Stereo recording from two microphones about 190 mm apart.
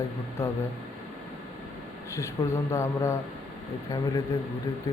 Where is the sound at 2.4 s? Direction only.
15° left (ahead or behind).